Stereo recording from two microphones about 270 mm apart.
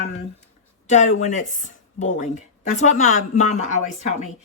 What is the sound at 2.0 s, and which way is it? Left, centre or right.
Speech, left.